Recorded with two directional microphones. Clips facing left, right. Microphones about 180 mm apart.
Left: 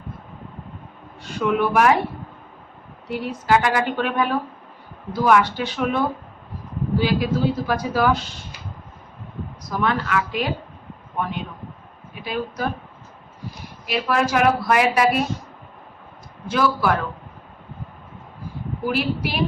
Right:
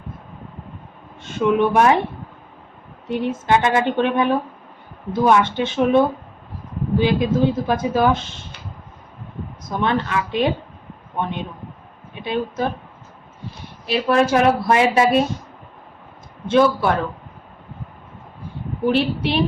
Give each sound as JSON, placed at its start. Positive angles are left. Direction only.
{"t": 1.2, "sound": "speech", "side_deg": -25}
{"t": 3.1, "sound": "speech", "side_deg": -20}
{"t": 7.0, "sound": "speech", "side_deg": -20}
{"t": 9.6, "sound": "speech", "side_deg": -25}
{"t": 13.8, "sound": "speech", "side_deg": -30}
{"t": 16.5, "sound": "speech", "side_deg": -25}
{"t": 18.9, "sound": "speech", "side_deg": -25}